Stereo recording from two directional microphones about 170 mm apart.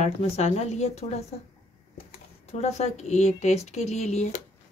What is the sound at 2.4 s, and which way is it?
Speech, 40° left (ahead or behind).